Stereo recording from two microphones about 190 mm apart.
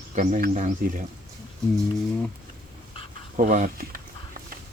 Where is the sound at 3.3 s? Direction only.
40° right (ahead or behind).